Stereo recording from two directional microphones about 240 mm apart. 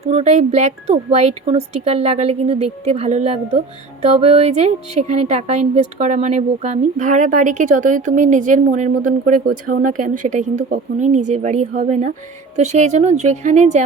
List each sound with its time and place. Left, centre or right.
0.1 s a woman's voice: right